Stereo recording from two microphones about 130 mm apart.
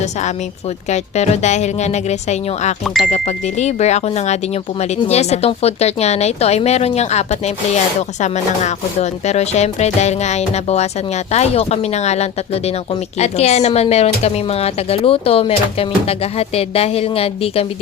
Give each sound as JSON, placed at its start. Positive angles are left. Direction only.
{"t": 0.0, "sound": "speech", "side_deg": 65}
{"t": 2.8, "sound": "speech", "side_deg": 0}
{"t": 3.1, "sound": "speech", "side_deg": 60}